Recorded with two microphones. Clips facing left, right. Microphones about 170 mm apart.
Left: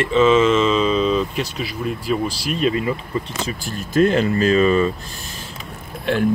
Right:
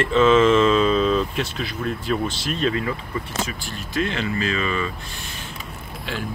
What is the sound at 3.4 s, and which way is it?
Speech, 45° left (ahead or behind).